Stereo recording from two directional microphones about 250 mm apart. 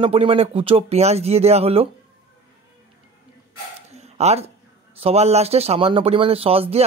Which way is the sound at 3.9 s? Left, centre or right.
Right.